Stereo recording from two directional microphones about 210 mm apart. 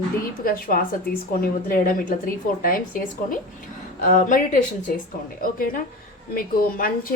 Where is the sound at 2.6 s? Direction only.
40° left (ahead or behind).